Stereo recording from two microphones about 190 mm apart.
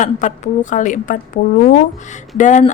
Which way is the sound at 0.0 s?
40° left (ahead or behind).